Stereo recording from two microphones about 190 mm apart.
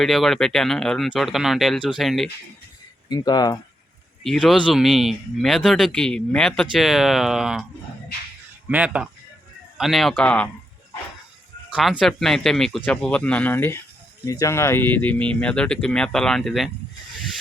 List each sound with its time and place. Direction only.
0.0 s speech: centre (ahead or behind)
3.1 s speech: 20° left (ahead or behind)
4.2 s speech: centre (ahead or behind)
8.7 s speech: 5° right (ahead or behind)
11.7 s speech: centre (ahead or behind)